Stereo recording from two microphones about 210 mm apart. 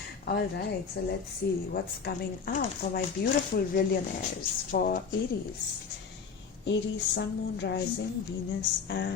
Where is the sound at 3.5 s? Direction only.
45° left (ahead or behind).